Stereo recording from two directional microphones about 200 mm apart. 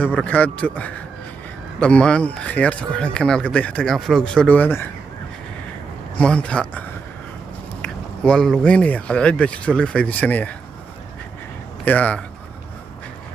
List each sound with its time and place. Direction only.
0.0 s a man's voice: 5° left (ahead or behind)
6.1 s speech: 5° left (ahead or behind)
11.9 s a man's voice: 5° left (ahead or behind)